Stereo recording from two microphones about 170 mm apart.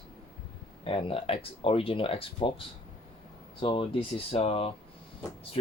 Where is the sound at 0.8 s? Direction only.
30° left (ahead or behind).